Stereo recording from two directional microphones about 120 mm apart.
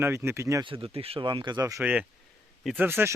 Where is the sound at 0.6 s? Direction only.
50° right (ahead or behind); by 1.8 s 30° right (ahead or behind).